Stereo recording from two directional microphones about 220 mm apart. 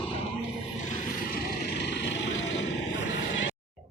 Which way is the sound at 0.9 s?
40° left (ahead or behind).